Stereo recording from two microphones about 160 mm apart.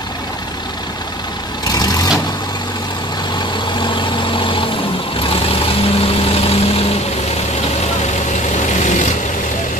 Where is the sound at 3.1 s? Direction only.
30° left (ahead or behind); by 9.1 s 50° left (ahead or behind).